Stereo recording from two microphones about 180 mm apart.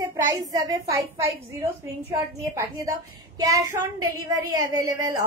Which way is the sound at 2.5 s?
20° right (ahead or behind).